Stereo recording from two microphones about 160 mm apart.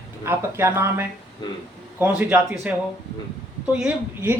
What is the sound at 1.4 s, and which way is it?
Speech, 30° left (ahead or behind).